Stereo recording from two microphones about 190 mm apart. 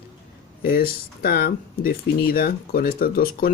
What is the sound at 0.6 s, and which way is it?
Speech, 50° left (ahead or behind).